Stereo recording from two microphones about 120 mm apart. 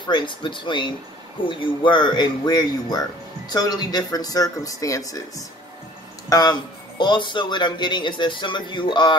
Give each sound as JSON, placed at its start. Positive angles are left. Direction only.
{"t": 0.0, "sound": "speech", "side_deg": 40}